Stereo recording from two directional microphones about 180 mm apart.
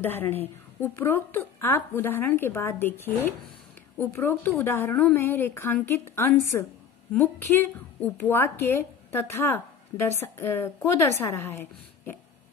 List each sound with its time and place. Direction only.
0.0 s a woman's voice: 10° left (ahead or behind)
8.0 s a woman's voice: 10° left (ahead or behind)